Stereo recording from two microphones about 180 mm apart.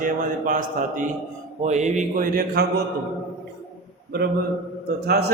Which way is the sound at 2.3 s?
60° right (ahead or behind).